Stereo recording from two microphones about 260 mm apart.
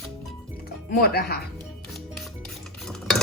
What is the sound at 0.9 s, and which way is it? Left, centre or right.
Speech, left.